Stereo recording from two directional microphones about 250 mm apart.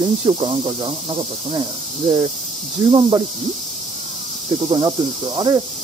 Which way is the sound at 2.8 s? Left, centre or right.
Centre.